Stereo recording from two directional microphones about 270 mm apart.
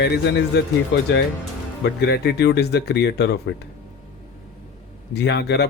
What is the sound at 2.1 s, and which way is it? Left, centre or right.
Speech, left.